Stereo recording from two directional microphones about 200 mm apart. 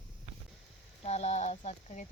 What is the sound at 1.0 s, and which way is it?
Speech, 35° left (ahead or behind).